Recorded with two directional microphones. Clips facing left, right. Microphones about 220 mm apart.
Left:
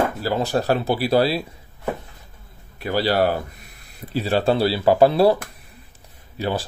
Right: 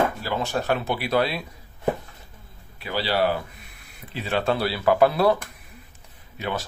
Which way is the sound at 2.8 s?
45° left (ahead or behind).